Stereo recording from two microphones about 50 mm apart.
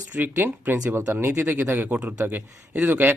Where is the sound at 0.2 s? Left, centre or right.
Right.